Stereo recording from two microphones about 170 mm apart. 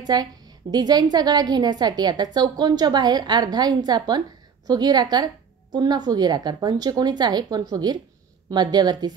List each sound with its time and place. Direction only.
0.0 s a woman's voice: 25° right (ahead or behind)